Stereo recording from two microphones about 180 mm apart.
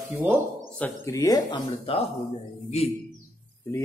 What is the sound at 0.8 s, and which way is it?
Speech, 15° left (ahead or behind).